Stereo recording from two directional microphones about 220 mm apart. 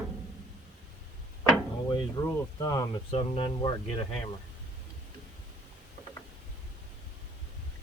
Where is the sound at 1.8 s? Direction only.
15° left (ahead or behind).